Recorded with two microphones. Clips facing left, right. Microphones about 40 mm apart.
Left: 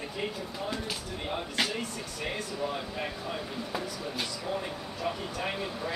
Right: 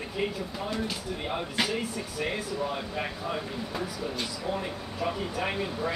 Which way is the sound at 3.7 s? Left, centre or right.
Centre.